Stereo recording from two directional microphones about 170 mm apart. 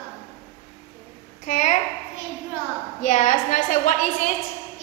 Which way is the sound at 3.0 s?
45° left (ahead or behind).